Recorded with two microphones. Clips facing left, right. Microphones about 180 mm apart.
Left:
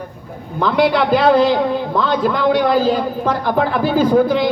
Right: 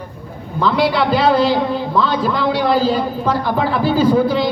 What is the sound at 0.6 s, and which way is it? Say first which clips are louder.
A man's voice: left 1 dB; 50° left (ahead or behind).